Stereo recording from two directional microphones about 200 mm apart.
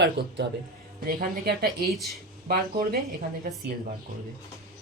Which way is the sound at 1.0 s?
45° right (ahead or behind).